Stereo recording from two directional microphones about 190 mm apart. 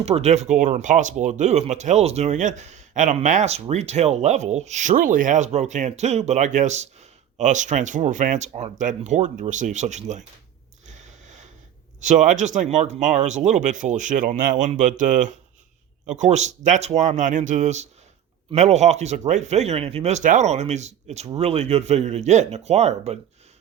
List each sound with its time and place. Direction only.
0.0 s speech: 35° right (ahead or behind)
10.8 s a sound: 40° right (ahead or behind)
11.9 s speech: 40° right (ahead or behind)